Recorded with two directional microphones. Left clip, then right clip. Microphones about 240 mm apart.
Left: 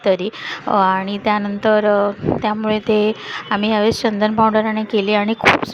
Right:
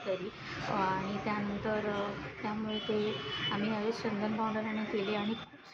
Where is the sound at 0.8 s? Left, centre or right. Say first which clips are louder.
Left 17 dB; left.